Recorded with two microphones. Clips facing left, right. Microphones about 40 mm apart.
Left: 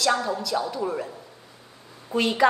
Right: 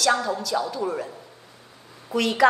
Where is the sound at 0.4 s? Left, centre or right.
Right.